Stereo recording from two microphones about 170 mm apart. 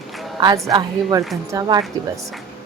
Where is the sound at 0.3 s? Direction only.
25° right (ahead or behind).